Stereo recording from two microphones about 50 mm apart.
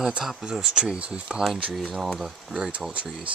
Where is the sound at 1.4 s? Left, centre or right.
Centre.